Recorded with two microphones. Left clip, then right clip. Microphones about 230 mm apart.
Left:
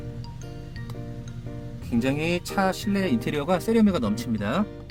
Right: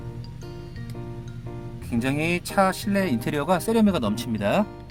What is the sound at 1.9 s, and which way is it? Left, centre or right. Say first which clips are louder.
Speech: even; centre.